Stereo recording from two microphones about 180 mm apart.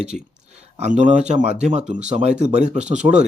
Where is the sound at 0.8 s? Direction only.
40° right (ahead or behind).